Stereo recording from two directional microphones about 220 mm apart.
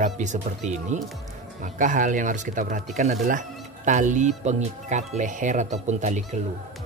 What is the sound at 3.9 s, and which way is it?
Speech, 35° right (ahead or behind).